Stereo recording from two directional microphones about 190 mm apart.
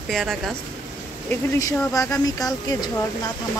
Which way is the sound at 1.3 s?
15° left (ahead or behind).